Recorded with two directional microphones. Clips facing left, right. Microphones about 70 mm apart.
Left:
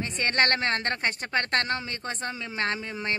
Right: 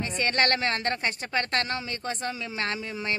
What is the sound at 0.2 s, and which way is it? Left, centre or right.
A woman's voice, left.